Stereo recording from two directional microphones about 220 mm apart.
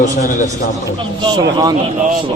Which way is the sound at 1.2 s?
20° right (ahead or behind).